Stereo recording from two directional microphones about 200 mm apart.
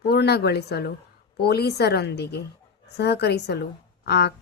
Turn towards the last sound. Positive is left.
turn(degrees=55)  # may be behind; listen again after turning